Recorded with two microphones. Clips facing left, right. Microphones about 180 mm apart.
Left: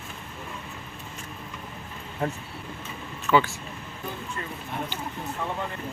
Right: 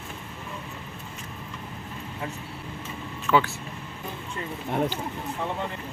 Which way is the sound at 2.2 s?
45° left (ahead or behind).